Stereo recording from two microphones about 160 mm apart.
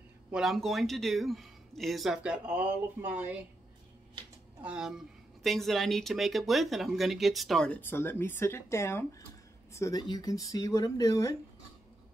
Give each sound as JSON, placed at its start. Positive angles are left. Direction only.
{"t": 0.3, "sound": "speech", "side_deg": 0}
{"t": 4.6, "sound": "speech", "side_deg": -5}